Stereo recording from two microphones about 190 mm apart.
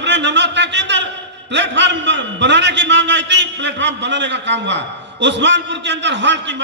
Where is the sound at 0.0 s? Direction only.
65° right (ahead or behind).